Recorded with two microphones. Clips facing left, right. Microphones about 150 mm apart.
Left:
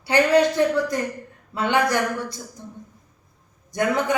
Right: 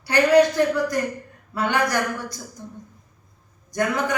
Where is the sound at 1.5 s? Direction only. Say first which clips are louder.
Left 2 dB; 20° left (ahead or behind).